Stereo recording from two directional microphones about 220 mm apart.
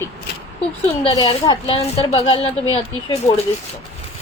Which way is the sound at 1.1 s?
15° left (ahead or behind).